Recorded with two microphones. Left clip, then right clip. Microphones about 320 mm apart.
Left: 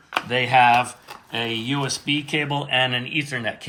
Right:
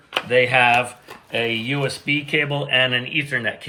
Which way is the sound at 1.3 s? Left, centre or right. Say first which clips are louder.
Right 4 dB; left.